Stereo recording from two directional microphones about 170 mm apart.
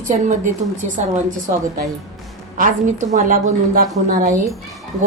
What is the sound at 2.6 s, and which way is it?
A woman's voice, 50° right (ahead or behind).